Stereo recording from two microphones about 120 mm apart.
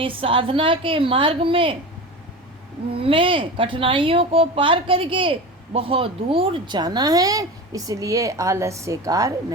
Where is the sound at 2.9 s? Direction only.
50° right (ahead or behind).